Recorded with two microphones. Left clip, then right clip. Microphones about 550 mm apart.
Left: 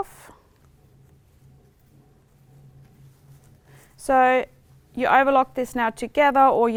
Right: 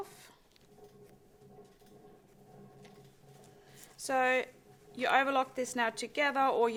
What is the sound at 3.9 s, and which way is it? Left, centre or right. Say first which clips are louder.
A woman's voice: left 12 dB; left.